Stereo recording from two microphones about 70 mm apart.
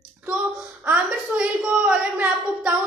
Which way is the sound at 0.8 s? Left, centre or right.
Right.